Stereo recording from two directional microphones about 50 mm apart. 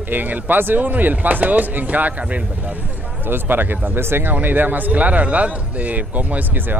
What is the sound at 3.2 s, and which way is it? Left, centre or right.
Speech, right.